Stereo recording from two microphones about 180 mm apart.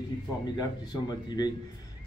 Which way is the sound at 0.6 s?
20° left (ahead or behind).